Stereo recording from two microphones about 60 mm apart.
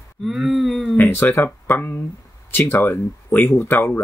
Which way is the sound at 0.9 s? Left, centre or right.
Left.